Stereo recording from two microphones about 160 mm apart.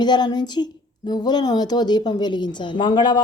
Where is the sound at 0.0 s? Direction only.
25° left (ahead or behind).